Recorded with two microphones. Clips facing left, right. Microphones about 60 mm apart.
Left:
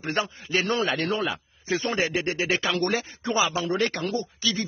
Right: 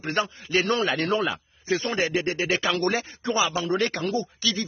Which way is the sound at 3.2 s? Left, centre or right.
Left.